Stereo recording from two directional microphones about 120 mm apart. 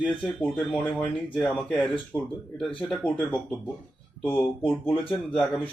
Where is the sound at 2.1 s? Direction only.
20° left (ahead or behind).